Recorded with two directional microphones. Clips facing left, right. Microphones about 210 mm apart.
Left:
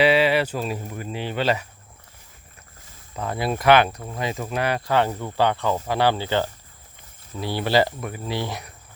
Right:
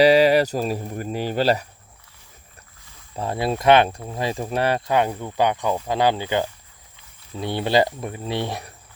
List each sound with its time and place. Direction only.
0.0 s speech: 40° right (ahead or behind)
3.2 s speech: 25° right (ahead or behind)
4.9 s speech: 15° right (ahead or behind)